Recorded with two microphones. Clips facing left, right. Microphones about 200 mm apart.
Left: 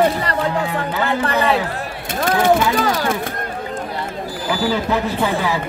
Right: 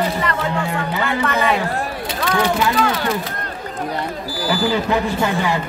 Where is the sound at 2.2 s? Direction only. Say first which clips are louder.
Left 4 dB; 50° left (ahead or behind).